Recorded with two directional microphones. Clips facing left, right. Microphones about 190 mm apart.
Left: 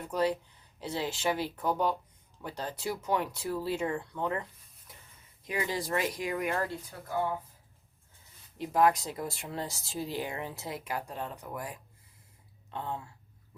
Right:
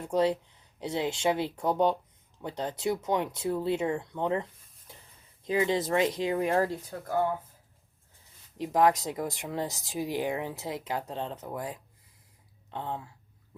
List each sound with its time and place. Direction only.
0.0 s speech: 25° right (ahead or behind)
4.9 s a sound: 30° right (ahead or behind)
5.5 s speech: 25° right (ahead or behind)
8.5 s speech: 20° right (ahead or behind)